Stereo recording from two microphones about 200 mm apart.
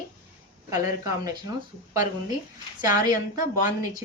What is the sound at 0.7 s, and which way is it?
Speech, 15° right (ahead or behind).